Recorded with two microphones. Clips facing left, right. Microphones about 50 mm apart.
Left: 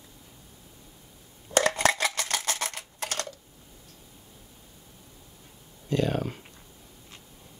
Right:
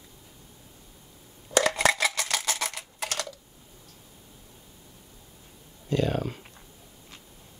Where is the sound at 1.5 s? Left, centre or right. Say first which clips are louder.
Even; left.